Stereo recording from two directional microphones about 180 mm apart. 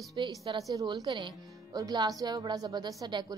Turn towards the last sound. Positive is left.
turn(degrees=-20)  # may be behind; listen again after turning